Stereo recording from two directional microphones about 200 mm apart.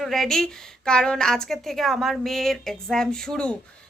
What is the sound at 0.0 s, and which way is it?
A woman's voice, centre (ahead or behind).